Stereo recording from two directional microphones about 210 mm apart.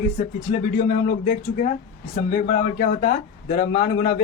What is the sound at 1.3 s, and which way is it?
Speech, 40° left (ahead or behind).